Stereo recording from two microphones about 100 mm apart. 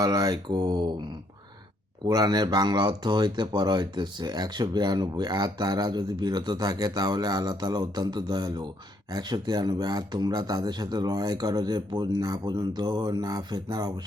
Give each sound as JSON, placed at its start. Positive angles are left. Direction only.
{"t": 0.0, "sound": "speech", "side_deg": -40}
{"t": 2.0, "sound": "speech", "side_deg": -40}